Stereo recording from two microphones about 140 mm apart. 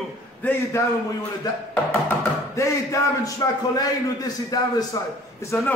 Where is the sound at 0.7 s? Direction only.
20° left (ahead or behind).